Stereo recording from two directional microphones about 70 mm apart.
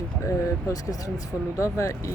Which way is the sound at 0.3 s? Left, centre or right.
Left.